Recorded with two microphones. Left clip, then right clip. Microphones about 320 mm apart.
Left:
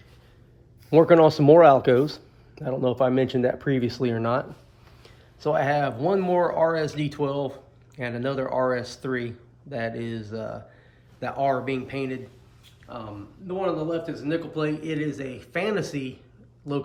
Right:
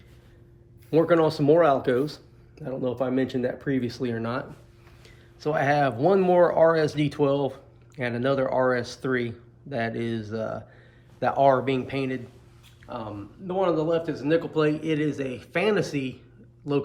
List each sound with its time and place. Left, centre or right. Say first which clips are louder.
0.9 s speech: left 5 dB; left; by 16.8 s centre